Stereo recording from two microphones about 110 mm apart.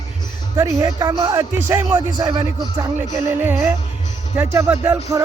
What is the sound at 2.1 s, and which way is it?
Speech, 40° right (ahead or behind).